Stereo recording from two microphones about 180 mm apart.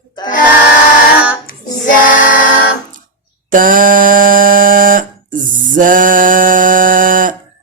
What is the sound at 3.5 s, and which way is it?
Buzzer, 50° right (ahead or behind).